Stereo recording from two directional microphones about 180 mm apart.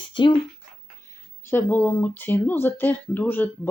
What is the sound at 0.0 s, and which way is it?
Speech, 25° left (ahead or behind).